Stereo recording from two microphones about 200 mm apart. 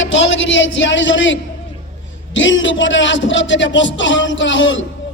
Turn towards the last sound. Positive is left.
turn(degrees=70)  # may be behind; listen again after turning